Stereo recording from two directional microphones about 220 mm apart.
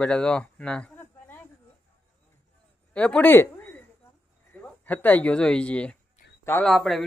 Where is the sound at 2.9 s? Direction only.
5° left (ahead or behind).